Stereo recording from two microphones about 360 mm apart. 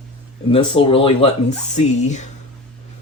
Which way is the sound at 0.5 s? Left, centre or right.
Centre.